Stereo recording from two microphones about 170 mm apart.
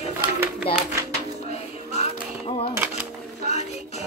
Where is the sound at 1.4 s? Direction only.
40° left (ahead or behind).